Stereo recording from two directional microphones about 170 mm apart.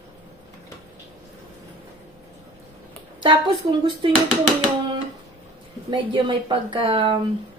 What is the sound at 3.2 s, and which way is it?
Speech, 30° right (ahead or behind).